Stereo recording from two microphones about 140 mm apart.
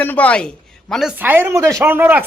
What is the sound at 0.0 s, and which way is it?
Speech, 10° left (ahead or behind).